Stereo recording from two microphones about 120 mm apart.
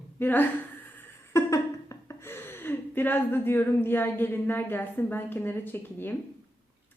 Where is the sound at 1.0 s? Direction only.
25° left (ahead or behind).